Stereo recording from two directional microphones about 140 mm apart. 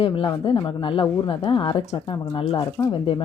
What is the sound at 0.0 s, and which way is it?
A woman's voice, 40° left (ahead or behind).